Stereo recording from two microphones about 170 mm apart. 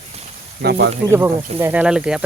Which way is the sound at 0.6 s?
80° right.